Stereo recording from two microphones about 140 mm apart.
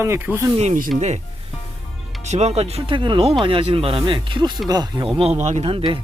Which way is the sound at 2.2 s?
55° right (ahead or behind).